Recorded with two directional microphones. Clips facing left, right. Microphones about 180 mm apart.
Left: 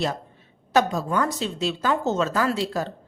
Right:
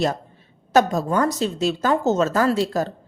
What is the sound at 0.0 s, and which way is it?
A woman's voice, 45° right (ahead or behind).